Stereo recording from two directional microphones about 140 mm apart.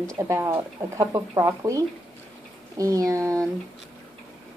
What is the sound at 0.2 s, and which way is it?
Speech, 20° right (ahead or behind).